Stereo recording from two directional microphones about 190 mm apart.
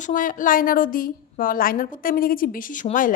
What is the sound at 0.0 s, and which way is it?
A woman's voice, 45° left (ahead or behind).